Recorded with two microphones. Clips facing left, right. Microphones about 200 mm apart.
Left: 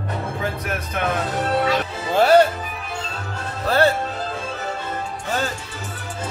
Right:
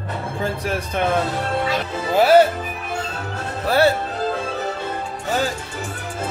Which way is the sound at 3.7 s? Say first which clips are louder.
Right 1 dB; 10° right (ahead or behind).